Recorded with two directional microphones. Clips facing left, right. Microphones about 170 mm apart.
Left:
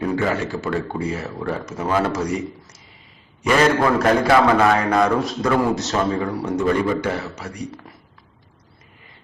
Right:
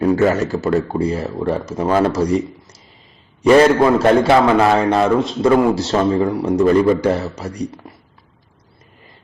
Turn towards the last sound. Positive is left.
turn(degrees=-35)  # may be behind; listen again after turning